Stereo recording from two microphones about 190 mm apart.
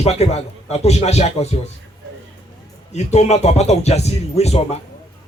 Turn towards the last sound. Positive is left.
turn(degrees=35)  # may be behind; listen again after turning